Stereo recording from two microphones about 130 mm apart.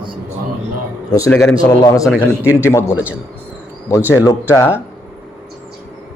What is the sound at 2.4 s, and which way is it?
Speech, 20° left (ahead or behind).